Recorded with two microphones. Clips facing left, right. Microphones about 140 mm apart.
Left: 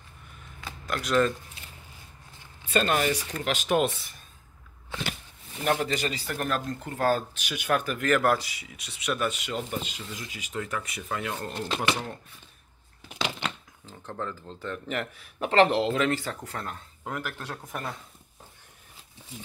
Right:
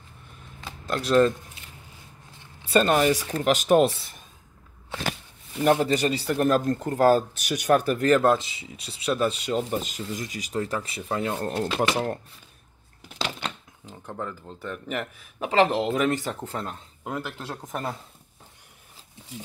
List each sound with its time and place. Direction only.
0.8 s speech: 30° right (ahead or behind)
2.6 s speech: 40° right (ahead or behind)
5.7 s speech: 30° right (ahead or behind)
13.8 s speech: 10° right (ahead or behind)
16.1 s speech: 20° right (ahead or behind)